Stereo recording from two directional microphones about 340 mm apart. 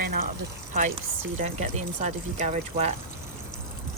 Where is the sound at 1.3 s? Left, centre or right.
Centre.